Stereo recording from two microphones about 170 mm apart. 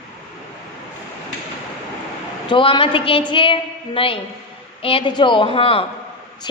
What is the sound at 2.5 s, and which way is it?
A woman's voice, 30° left (ahead or behind).